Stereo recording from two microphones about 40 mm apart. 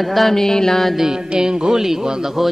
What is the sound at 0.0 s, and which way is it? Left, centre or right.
Music, centre.